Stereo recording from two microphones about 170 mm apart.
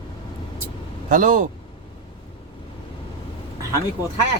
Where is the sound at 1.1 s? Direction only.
50° right (ahead or behind).